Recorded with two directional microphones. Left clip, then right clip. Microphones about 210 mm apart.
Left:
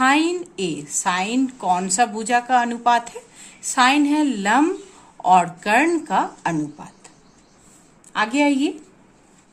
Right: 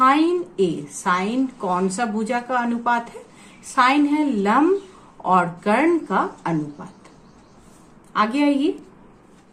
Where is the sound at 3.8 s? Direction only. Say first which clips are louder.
Left 1 dB; 55° left (ahead or behind).